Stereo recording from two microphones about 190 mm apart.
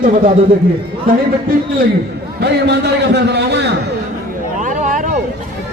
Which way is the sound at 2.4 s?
60° right (ahead or behind).